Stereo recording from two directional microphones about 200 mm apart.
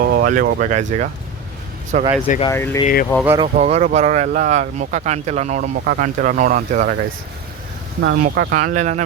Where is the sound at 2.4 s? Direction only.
15° left (ahead or behind).